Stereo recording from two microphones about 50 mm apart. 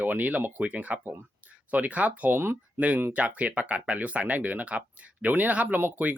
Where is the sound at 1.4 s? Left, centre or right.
Right.